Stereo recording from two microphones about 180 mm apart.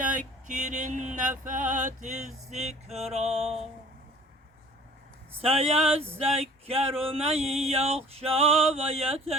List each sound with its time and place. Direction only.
0.0 s a sound: 45° right (ahead or behind)
1.5 s male singing: 45° right (ahead or behind)
5.4 s male singing: 35° right (ahead or behind)